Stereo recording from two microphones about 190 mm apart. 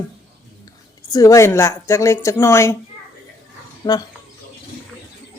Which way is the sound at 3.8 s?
20° left (ahead or behind).